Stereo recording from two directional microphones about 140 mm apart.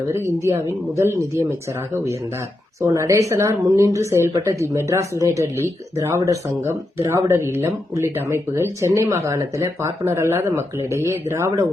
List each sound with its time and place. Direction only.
0.1 s speech: 20° right (ahead or behind)
2.8 s speech: 20° right (ahead or behind)